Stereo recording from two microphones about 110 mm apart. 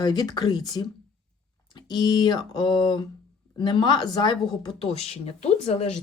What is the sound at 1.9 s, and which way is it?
Speech, 40° left (ahead or behind).